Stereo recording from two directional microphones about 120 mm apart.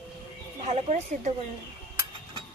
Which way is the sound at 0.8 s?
70° right (ahead or behind).